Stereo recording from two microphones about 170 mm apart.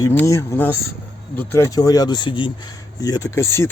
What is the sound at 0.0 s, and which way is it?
Speech, 15° left (ahead or behind).